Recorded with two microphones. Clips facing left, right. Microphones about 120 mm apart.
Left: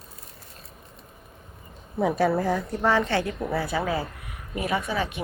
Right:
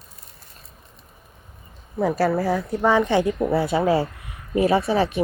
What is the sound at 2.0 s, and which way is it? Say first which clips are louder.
A woman's voice: right 2 dB; centre (ahead or behind).